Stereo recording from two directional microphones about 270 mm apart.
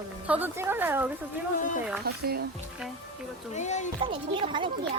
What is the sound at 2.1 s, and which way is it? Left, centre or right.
Speech, right.